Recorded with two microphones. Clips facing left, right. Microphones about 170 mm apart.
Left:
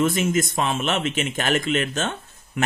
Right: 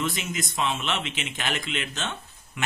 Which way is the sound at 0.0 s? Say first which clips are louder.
Left 9 dB; 50° left (ahead or behind).